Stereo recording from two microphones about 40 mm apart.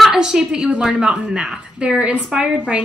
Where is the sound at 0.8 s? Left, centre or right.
Right.